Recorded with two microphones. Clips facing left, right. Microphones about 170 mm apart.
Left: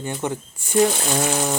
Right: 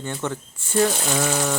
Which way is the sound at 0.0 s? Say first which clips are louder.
Left 2 dB; 15° left (ahead or behind).